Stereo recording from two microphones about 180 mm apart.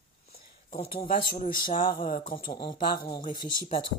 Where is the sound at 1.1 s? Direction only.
50° left (ahead or behind).